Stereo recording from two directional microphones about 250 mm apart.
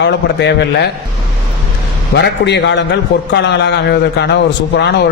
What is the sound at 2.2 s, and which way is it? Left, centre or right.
A man's voice, left.